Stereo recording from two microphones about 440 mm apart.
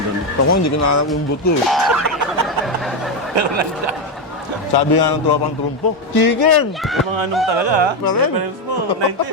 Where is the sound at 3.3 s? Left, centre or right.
Right.